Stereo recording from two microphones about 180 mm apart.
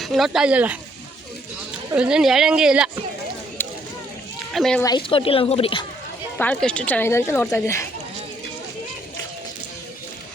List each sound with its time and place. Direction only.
0.0 s speech: centre (ahead or behind)
1.9 s speech: 5° right (ahead or behind)
3.6 s a sound: 10° left (ahead or behind)
4.5 s speech: centre (ahead or behind)
4.8 s speech: 25° left (ahead or behind)
6.3 s speech: 10° left (ahead or behind)